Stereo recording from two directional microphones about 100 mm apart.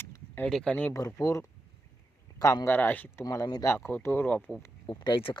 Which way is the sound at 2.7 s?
20° left (ahead or behind).